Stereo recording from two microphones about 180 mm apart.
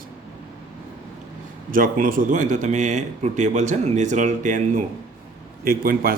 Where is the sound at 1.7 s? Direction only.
50° right (ahead or behind).